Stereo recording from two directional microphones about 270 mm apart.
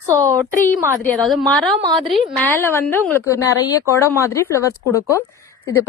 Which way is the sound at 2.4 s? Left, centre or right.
Centre.